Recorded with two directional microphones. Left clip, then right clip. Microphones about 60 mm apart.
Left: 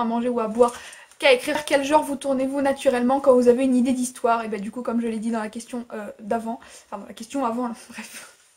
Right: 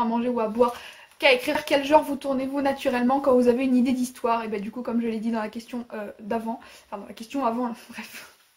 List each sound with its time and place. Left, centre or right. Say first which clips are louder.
0.0 s speech: left 1 dB; left